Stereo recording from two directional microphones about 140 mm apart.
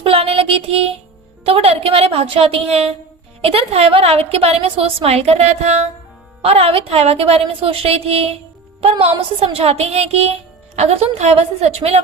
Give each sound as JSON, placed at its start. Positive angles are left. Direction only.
{"t": 0.0, "sound": "child singing", "side_deg": -45}
{"t": 1.5, "sound": "a woman's voice", "side_deg": -45}